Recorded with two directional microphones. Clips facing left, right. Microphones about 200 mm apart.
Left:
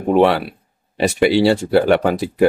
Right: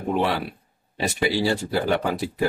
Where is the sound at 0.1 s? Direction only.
70° left (ahead or behind).